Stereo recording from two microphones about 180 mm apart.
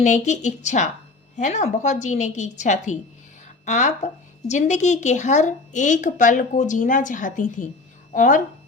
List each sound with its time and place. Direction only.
0.0 s a woman's voice: 40° left (ahead or behind)